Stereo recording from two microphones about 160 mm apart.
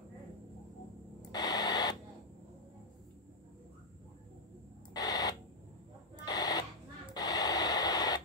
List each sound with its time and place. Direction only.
1.3 s radio: 25° left (ahead or behind)
4.9 s a sound: 25° left (ahead or behind)
7.2 s radio: 25° left (ahead or behind)